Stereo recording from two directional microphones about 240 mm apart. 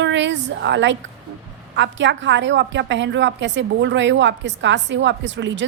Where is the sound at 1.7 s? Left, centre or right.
Right.